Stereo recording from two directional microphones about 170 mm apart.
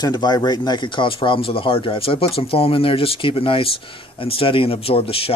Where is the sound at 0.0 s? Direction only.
25° left (ahead or behind).